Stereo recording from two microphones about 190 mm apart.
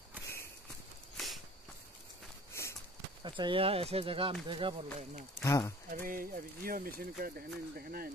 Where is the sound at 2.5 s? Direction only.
15° left (ahead or behind).